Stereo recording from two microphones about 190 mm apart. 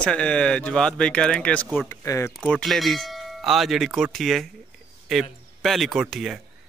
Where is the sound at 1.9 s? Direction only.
15° left (ahead or behind).